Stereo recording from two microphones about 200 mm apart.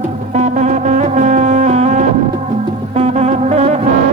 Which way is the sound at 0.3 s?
35° right (ahead or behind).